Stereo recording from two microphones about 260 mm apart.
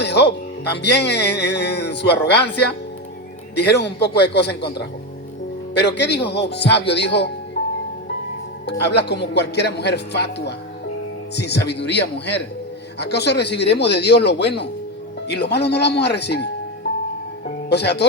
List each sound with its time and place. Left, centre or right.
0.0 s speech: left
8.6 s speech: left
17.7 s speech: left